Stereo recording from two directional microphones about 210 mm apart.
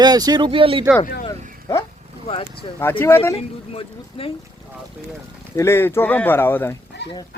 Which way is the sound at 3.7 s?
25° left (ahead or behind).